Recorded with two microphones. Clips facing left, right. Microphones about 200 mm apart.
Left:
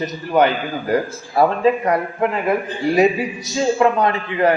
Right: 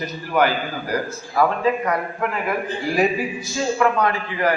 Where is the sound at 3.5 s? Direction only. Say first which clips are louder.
Left 4 dB; 20° left (ahead or behind).